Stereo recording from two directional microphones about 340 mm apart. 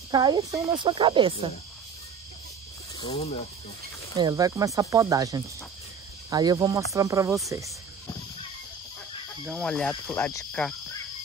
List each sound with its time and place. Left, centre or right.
0.1 s speech: centre
3.0 s cricket: centre
4.2 s speech: centre
9.5 s speech: centre